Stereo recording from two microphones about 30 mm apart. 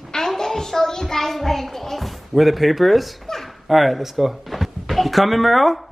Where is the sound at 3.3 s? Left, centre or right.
Centre.